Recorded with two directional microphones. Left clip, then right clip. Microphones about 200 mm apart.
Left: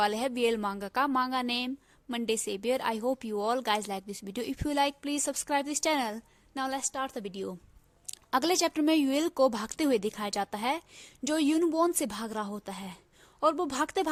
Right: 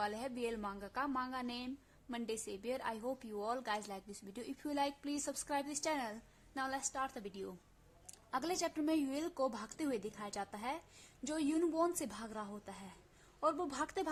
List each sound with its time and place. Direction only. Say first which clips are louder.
0.0 s a woman's voice: left 12 dB; 45° left (ahead or behind)